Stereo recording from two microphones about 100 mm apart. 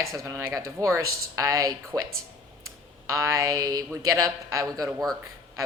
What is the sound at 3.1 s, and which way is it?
Speech, 30° right (ahead or behind).